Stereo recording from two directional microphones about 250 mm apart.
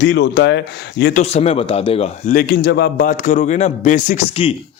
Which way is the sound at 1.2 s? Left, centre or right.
Left.